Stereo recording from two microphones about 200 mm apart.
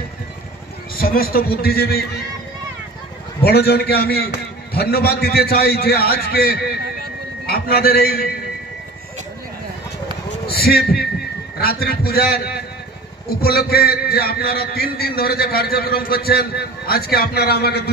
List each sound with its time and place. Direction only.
0.9 s a man's voice: 45° left (ahead or behind)
3.4 s a man's voice: 50° left (ahead or behind)
10.4 s a man's voice: 50° left (ahead or behind)